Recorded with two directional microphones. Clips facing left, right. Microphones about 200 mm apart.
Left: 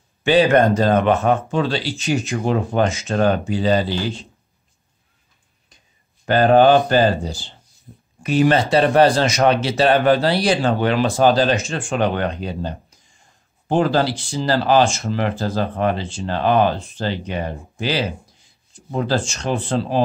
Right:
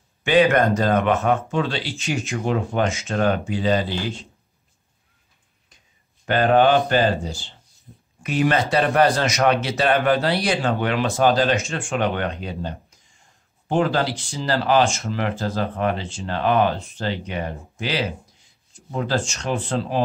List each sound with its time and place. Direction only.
0.2 s speech: 30° left (ahead or behind)
6.2 s speech: 35° left (ahead or behind)